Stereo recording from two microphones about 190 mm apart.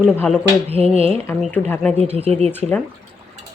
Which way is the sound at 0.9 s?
30° right (ahead or behind).